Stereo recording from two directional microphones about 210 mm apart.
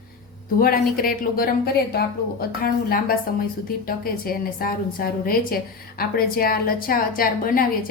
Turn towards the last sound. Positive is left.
turn(degrees=40)  # may be behind; listen again after turning